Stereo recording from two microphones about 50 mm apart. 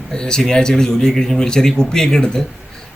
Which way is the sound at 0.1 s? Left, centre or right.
Centre.